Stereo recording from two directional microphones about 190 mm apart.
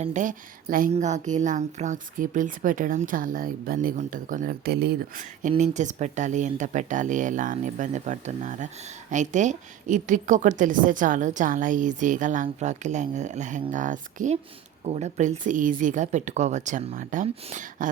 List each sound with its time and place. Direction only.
0.0 s a woman's voice: 40° right (ahead or behind)